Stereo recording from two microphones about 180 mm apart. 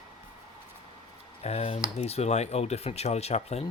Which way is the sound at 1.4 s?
35° left (ahead or behind).